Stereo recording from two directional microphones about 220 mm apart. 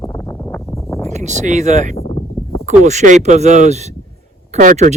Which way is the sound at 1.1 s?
30° right (ahead or behind).